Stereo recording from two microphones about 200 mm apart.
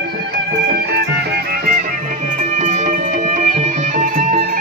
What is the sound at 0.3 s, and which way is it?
Music, 55° right (ahead or behind).